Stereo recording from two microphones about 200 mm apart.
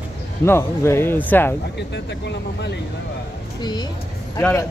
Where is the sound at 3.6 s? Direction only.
20° left (ahead or behind).